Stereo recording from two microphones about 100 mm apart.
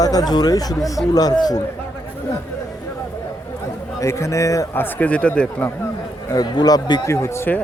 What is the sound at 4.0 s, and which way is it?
Speech, 30° left (ahead or behind).